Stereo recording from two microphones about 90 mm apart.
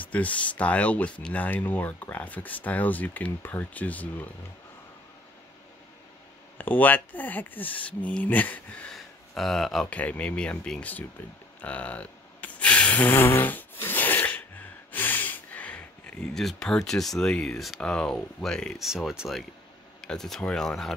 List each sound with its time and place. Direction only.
0.0 s speech: 15° left (ahead or behind)
6.6 s speech: 20° left (ahead or behind)
8.9 s a sound: 5° left (ahead or behind)
9.8 s speech: 15° left (ahead or behind)
11.6 s a sound: 15° left (ahead or behind)
17.2 s speech: 10° left (ahead or behind)